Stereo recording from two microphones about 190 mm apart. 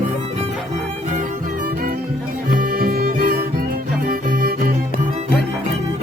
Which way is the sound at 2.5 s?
50° right (ahead or behind).